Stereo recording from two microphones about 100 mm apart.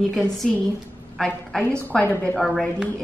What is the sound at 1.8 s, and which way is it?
Speech, 20° left (ahead or behind).